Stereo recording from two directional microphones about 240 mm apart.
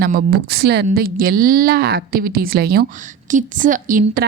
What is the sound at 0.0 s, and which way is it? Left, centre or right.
A woman's voice, right.